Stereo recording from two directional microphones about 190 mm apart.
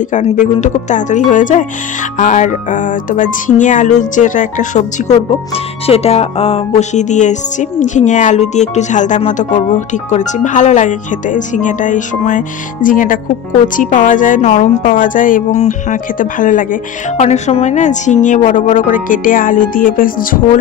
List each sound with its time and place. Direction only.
0.1 s a woman's voice: 40° left (ahead or behind)